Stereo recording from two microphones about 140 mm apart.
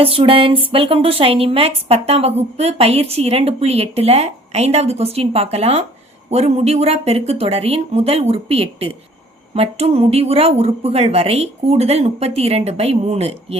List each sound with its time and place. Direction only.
0.0 s speech: 40° right (ahead or behind)